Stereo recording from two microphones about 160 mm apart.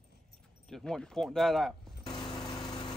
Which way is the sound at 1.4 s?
Centre (ahead or behind).